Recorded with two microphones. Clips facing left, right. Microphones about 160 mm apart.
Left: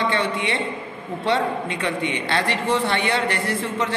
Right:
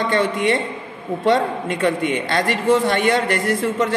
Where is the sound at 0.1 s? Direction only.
45° right (ahead or behind).